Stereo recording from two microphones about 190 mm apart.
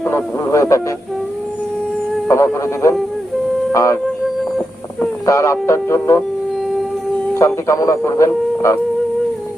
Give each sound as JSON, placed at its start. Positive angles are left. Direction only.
{"t": 0.0, "sound": "speech", "side_deg": 15}
{"t": 2.2, "sound": "speech", "side_deg": 15}
{"t": 3.7, "sound": "music", "side_deg": 15}
{"t": 4.4, "sound": "a sound", "side_deg": 0}
{"t": 5.2, "sound": "speech", "side_deg": 15}
{"t": 7.3, "sound": "speech", "side_deg": 15}